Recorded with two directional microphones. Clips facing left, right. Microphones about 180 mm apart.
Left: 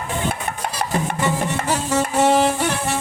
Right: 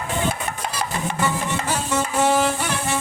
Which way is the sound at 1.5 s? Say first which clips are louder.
Left 3 dB; 40° left (ahead or behind).